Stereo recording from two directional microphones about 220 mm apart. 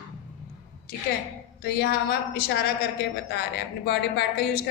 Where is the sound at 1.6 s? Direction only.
45° left (ahead or behind).